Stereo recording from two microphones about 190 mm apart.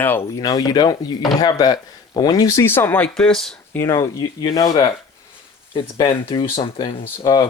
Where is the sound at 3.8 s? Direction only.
15° left (ahead or behind).